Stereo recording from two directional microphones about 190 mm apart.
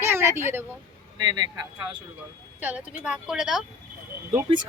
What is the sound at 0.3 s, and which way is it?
Speech, 10° right (ahead or behind).